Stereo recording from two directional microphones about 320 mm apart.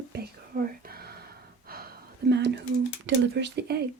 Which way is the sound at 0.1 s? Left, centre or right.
Right.